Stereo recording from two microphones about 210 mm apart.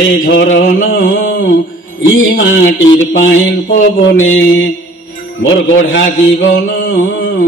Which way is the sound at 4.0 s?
60° left (ahead or behind).